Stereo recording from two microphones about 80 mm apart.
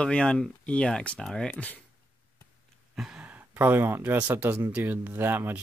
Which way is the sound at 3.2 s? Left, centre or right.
Right.